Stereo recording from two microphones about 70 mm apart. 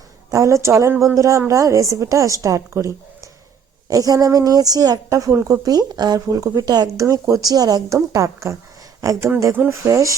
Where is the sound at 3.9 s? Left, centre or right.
Right.